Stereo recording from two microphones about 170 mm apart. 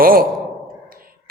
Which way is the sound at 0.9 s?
60° right (ahead or behind).